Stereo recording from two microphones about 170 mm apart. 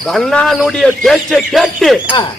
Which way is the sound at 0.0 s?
Centre (ahead or behind).